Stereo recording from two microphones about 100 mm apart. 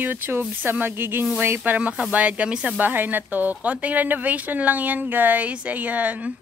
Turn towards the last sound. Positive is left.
turn(degrees=-15)  # may be behind; listen again after turning